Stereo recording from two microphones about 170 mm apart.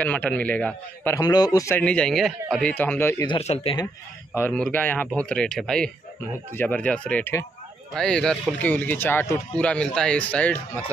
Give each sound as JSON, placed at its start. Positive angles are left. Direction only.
{"t": 0.0, "sound": "speech", "side_deg": 10}
{"t": 1.8, "sound": "speech", "side_deg": 5}
{"t": 3.3, "sound": "speech", "side_deg": 35}
{"t": 4.4, "sound": "speech", "side_deg": 10}